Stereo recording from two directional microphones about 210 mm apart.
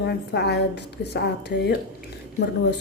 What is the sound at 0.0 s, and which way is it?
A woman's voice, 50° left (ahead or behind).